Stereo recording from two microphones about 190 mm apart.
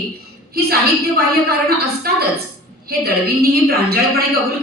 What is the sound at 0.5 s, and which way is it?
A woman's voice, 55° right (ahead or behind).